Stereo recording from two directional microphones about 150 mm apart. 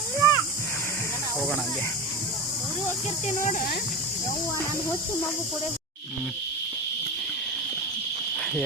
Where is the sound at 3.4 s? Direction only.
60° left (ahead or behind).